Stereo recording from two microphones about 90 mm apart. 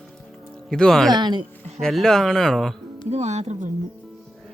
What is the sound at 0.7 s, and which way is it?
Speech, 5° left (ahead or behind).